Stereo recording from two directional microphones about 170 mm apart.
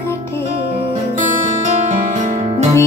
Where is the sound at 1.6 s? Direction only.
45° right (ahead or behind).